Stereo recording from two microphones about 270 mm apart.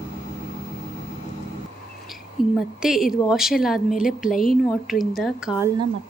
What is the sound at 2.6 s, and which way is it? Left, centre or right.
A woman's voice, centre.